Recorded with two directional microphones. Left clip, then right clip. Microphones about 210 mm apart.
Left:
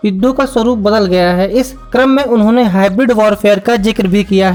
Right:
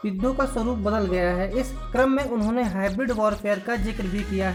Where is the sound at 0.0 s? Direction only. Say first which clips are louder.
Left 12 dB; 35° left (ahead or behind).